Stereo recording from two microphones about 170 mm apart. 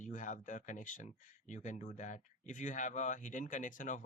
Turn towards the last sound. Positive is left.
turn(degrees=50)  # may be behind; listen again after turning